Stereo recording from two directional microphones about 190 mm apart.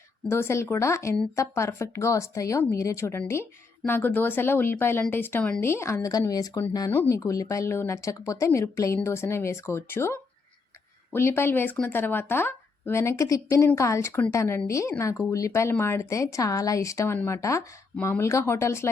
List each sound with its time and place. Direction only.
0.3 s speech: 15° left (ahead or behind)